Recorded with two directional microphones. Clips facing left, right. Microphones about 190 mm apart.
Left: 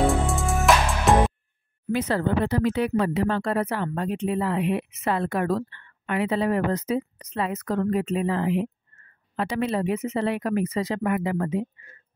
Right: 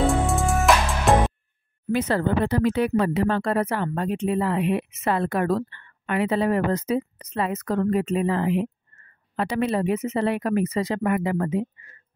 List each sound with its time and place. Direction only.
0.0 s music: centre (ahead or behind)
1.9 s speech: 50° right (ahead or behind)